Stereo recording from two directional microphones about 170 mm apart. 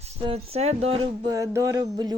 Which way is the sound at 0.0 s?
40° right (ahead or behind).